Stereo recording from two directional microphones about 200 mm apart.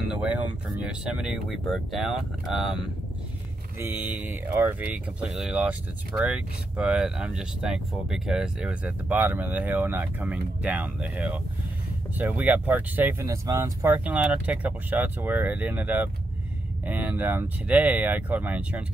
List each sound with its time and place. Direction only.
0.1 s speech: 5° right (ahead or behind)
3.8 s speech: 10° right (ahead or behind)